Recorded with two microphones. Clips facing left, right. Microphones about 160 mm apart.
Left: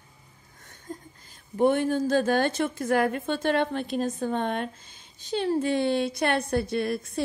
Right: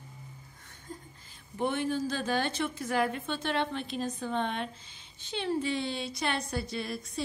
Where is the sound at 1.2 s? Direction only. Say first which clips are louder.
Left 10 dB; 45° left (ahead or behind).